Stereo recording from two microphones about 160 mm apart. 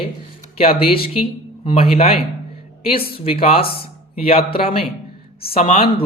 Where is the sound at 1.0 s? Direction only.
35° left (ahead or behind).